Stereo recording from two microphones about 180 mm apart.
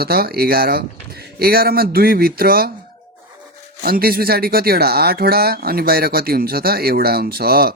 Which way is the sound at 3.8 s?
55° right (ahead or behind).